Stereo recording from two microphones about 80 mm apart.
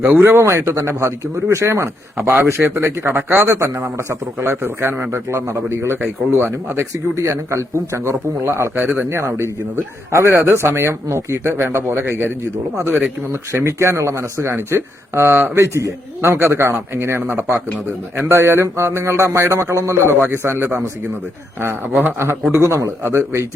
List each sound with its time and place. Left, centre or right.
0.0 s speech: right
8.8 s speech: centre
9.0 s speech: right
13.5 s speech: right
22.5 s speech: right